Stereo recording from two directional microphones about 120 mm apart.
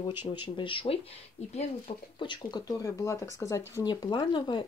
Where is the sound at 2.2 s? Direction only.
40° left (ahead or behind).